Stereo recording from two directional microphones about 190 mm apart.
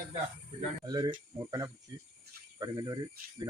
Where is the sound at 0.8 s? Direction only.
20° right (ahead or behind).